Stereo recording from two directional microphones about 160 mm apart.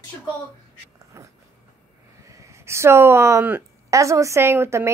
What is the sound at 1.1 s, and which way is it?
A woman's voice, 15° right (ahead or behind).